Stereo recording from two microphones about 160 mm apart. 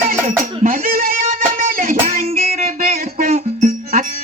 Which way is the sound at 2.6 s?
55° right (ahead or behind).